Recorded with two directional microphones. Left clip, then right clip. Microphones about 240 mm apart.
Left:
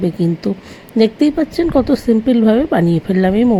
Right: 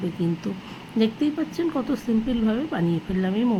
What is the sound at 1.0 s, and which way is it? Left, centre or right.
A woman's voice, left.